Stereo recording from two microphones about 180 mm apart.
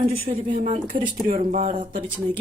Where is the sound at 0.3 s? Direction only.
45° right (ahead or behind).